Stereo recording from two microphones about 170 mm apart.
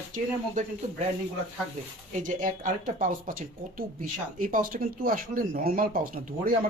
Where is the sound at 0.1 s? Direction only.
50° right (ahead or behind).